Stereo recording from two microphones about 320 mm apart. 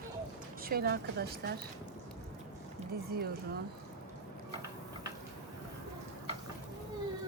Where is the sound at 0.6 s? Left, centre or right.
Right.